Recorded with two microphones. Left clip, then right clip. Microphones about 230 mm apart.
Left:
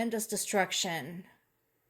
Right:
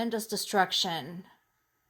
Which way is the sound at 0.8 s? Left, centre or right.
Right.